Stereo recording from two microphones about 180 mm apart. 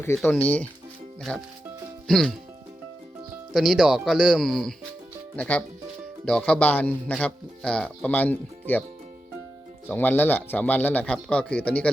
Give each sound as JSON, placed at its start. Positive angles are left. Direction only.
{"t": 0.2, "sound": "a man's voice", "side_deg": 10}
{"t": 3.5, "sound": "a man's voice", "side_deg": 0}
{"t": 9.9, "sound": "a man's voice", "side_deg": 10}